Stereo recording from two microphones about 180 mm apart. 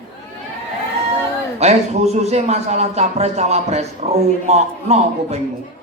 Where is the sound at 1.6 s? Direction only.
35° right (ahead or behind).